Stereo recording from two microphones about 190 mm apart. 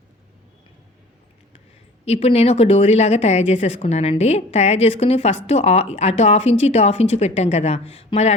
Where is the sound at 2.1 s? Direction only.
35° left (ahead or behind).